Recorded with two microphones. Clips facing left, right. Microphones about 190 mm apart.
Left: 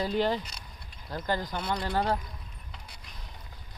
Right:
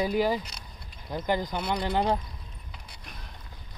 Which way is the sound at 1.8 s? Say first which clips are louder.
Right 3 dB; 15° right (ahead or behind).